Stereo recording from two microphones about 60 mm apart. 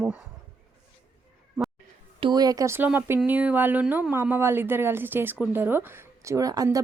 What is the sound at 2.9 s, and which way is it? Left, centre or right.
Speech, right.